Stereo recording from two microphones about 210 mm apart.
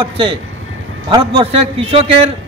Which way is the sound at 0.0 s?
25° right (ahead or behind).